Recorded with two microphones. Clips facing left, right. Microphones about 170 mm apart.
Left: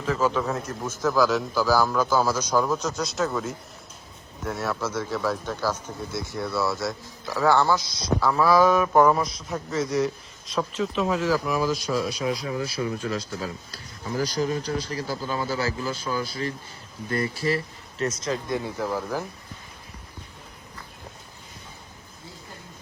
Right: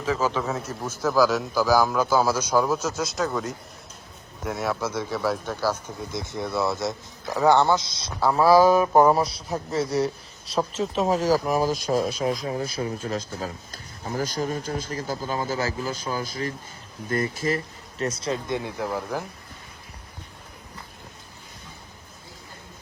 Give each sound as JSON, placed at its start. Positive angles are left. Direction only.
{"t": 0.0, "sound": "a man's voice", "side_deg": 0}
{"t": 4.4, "sound": "a man's voice", "side_deg": -10}
{"t": 18.0, "sound": "speech", "side_deg": -35}